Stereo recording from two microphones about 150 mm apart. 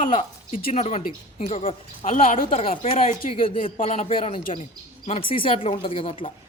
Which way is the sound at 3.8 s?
50° left (ahead or behind).